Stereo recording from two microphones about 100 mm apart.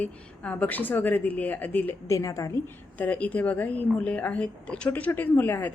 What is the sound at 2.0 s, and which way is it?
Speech, 30° left (ahead or behind).